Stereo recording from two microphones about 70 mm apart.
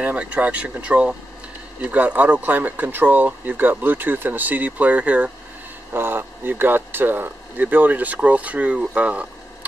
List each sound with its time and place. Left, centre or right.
0.0 s speech: centre
5.9 s speech: right